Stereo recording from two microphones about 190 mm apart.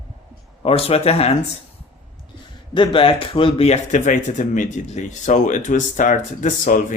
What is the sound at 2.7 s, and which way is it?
Speech, 25° left (ahead or behind).